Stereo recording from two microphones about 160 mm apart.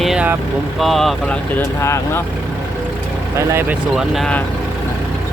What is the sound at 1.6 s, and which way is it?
Speech, 15° left (ahead or behind).